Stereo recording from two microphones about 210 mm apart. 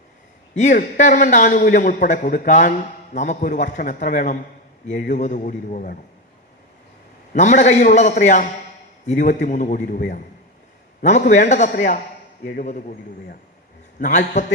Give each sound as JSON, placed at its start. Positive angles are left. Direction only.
{"t": 0.5, "sound": "a man's voice", "side_deg": 35}
{"t": 4.9, "sound": "a man's voice", "side_deg": 55}
{"t": 5.1, "sound": "a man's voice", "side_deg": 35}
{"t": 7.3, "sound": "a man's voice", "side_deg": 35}
{"t": 11.0, "sound": "a man's voice", "side_deg": 35}
{"t": 14.0, "sound": "a man's voice", "side_deg": 35}